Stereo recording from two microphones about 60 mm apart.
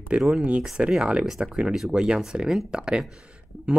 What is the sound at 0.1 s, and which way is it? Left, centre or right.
Speech, centre.